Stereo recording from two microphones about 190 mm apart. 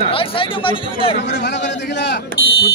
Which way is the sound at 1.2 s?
65° left (ahead or behind).